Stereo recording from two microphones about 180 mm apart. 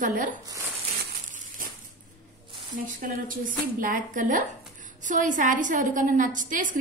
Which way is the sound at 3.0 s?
50° right (ahead or behind).